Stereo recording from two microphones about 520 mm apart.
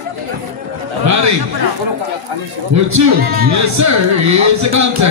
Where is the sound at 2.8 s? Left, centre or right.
Right.